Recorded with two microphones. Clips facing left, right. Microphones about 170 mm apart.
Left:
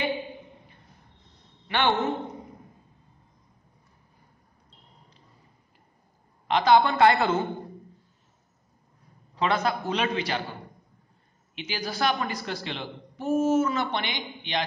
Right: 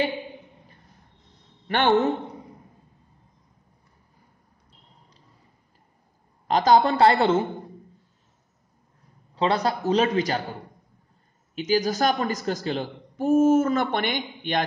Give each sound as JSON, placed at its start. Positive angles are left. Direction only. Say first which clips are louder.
{"t": 1.7, "sound": "a woman's voice", "louder": "right 4 dB", "side_deg": -45}
{"t": 6.4, "sound": "a man's voice", "louder": "right 2 dB", "side_deg": -40}
{"t": 9.3, "sound": "a man's voice", "louder": "right 2 dB", "side_deg": -30}
{"t": 11.5, "sound": "a woman's voice", "louder": "right 10 dB", "side_deg": -40}